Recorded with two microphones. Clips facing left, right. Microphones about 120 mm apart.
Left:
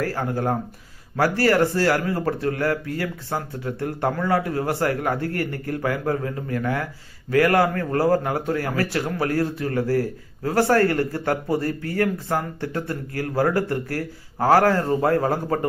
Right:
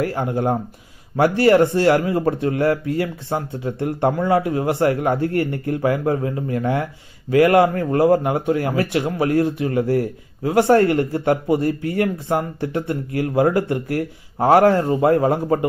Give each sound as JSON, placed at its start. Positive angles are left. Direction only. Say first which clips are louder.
{"t": 0.0, "sound": "speech", "louder": "right 3 dB", "side_deg": -20}